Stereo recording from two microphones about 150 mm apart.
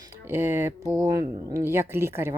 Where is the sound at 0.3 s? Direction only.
15° right (ahead or behind).